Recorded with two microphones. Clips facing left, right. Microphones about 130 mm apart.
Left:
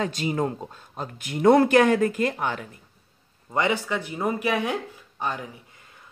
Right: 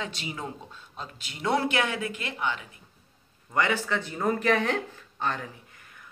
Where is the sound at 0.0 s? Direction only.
45° left (ahead or behind).